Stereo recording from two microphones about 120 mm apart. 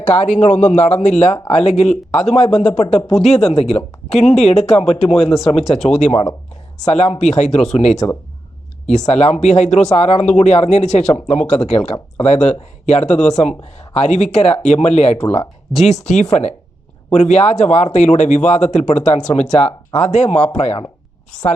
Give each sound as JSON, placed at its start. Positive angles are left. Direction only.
{"t": 0.0, "sound": "speech", "side_deg": 70}
{"t": 5.7, "sound": "speech", "side_deg": 65}